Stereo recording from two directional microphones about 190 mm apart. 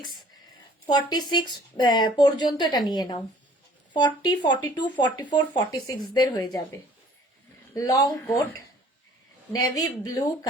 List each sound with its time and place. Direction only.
0.9 s speech: 20° left (ahead or behind)
7.7 s speech: 20° left (ahead or behind)
9.6 s speech: 20° left (ahead or behind)